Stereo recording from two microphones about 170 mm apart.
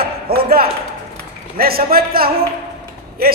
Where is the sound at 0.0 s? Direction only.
60° right (ahead or behind).